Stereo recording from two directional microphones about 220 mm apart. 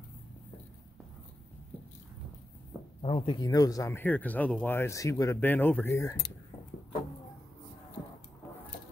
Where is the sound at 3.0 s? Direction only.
25° left (ahead or behind).